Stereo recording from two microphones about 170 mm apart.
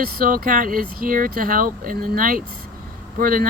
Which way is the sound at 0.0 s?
60° right (ahead or behind).